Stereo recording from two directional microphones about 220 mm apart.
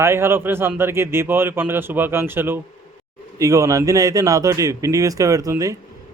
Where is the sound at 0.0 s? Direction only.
10° right (ahead or behind).